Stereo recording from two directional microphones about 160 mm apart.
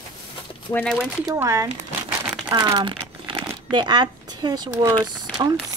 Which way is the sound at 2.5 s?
25° right (ahead or behind).